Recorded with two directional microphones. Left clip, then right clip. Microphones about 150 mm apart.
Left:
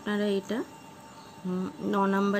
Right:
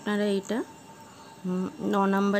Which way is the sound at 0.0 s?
45° right (ahead or behind).